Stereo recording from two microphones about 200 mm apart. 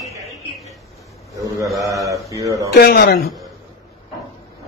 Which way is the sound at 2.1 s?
15° right (ahead or behind).